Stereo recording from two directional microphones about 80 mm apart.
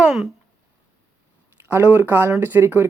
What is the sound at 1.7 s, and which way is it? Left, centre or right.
Speech, right.